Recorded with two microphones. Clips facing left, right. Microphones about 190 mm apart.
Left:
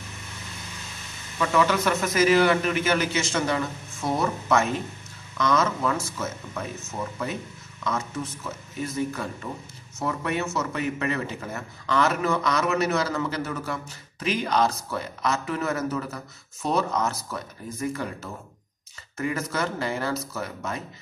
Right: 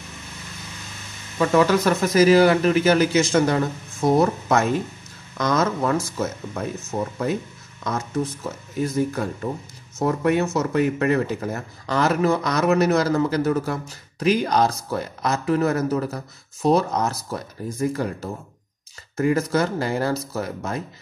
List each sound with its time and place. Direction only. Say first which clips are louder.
1.4 s speech: right 5 dB; 40° right (ahead or behind)